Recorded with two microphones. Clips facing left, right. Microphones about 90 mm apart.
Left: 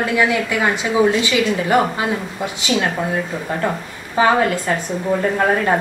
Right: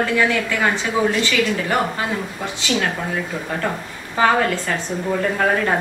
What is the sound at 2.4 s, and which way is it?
A woman's voice, 15° left (ahead or behind).